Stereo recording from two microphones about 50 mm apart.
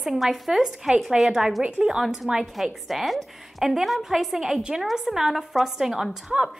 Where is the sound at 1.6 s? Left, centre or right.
Centre.